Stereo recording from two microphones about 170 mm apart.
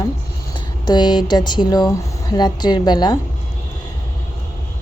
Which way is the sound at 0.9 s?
25° left (ahead or behind).